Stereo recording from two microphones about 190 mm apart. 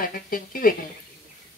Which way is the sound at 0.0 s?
50° left (ahead or behind).